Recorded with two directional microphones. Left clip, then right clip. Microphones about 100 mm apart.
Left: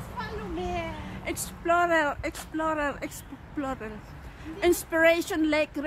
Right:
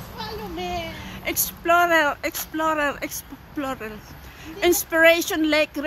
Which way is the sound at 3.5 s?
60° right (ahead or behind).